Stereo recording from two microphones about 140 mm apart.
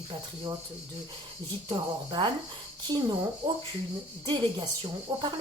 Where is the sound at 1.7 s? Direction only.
30° right (ahead or behind).